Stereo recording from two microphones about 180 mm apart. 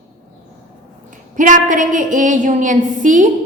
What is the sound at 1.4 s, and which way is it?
A woman's voice, 45° right (ahead or behind).